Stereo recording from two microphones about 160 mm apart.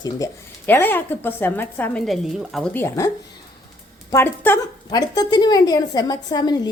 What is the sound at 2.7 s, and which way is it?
Speech, 15° left (ahead or behind).